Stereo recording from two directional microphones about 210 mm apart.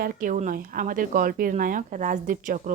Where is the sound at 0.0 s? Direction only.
40° right (ahead or behind).